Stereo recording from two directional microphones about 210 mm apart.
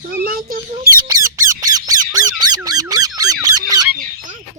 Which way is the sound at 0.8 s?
15° right (ahead or behind).